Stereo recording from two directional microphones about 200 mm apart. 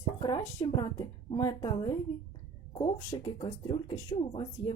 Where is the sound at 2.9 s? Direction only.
20° left (ahead or behind).